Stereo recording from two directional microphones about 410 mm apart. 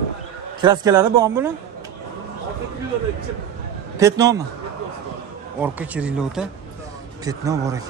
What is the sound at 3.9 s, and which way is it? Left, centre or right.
Speech, centre.